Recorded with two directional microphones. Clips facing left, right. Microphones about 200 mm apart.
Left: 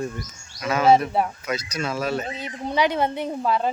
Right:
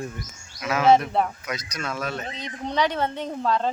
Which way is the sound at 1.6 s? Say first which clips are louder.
Left 4 dB; 30° left (ahead or behind).